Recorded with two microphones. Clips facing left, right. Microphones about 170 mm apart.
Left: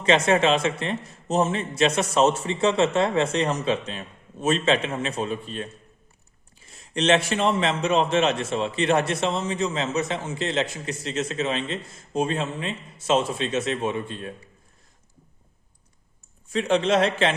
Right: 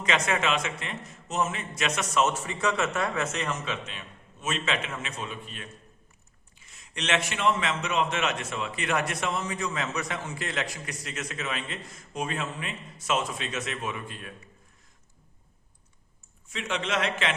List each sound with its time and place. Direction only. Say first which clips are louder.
0.0 s a man's voice: left 8 dB; 30° left (ahead or behind)
16.5 s a man's voice: left 10 dB; 35° left (ahead or behind)